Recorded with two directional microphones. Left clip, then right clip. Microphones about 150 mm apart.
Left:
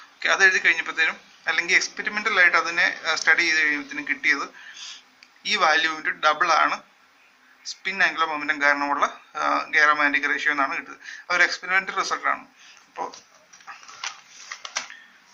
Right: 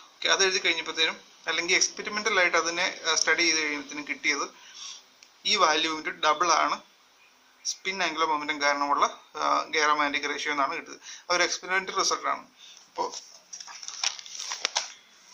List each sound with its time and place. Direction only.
0.2 s a man's voice: 35° right (ahead or behind)
5.5 s a man's voice: 35° right (ahead or behind)
7.8 s a man's voice: 35° right (ahead or behind)